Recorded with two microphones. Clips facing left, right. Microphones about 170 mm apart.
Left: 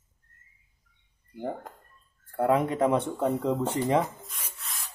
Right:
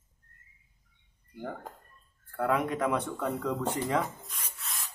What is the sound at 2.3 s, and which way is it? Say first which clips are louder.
Speech: left 4 dB; 30° left (ahead or behind).